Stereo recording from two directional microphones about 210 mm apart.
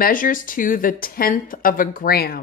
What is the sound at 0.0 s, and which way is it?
Speech, 40° left (ahead or behind).